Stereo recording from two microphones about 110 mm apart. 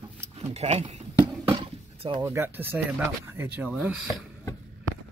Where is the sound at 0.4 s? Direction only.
75° right (ahead or behind).